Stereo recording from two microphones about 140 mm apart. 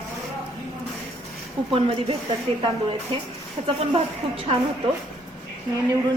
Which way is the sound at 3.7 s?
40° right (ahead or behind).